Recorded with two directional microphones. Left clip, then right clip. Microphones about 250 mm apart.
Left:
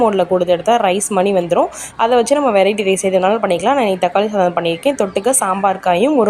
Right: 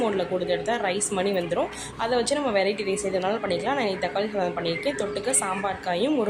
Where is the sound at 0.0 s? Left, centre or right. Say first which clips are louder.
Left 12 dB; left.